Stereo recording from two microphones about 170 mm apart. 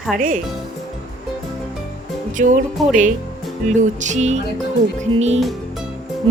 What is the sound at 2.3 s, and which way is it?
Speech, 50° right (ahead or behind).